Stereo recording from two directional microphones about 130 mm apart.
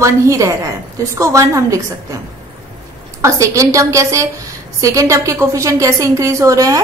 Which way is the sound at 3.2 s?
25° right (ahead or behind).